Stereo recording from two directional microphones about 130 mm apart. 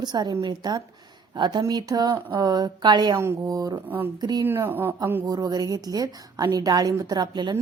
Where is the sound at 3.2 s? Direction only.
20° right (ahead or behind).